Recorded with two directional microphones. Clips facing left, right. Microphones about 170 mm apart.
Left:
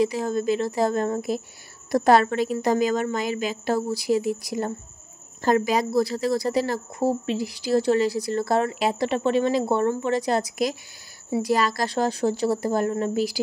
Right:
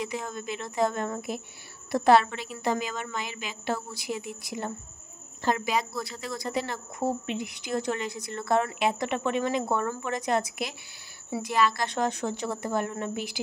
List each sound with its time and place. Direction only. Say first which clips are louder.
0.0 s speech: left 11 dB; 35° left (ahead or behind)